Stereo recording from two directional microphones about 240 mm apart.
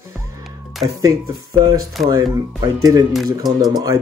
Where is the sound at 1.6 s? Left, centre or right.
Centre.